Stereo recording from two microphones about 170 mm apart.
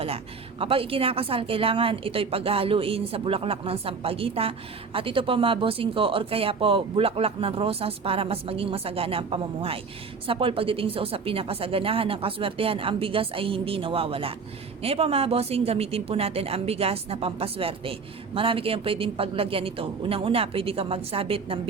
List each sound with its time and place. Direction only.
0.6 s speech: 35° right (ahead or behind)